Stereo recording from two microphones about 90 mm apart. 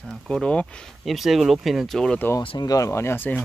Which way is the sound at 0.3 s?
10° left (ahead or behind).